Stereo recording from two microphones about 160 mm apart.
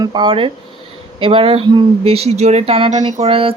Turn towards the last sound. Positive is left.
turn(degrees=-35)  # may be behind; listen again after turning